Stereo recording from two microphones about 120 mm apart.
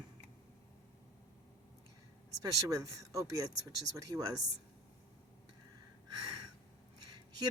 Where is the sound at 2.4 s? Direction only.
30° right (ahead or behind).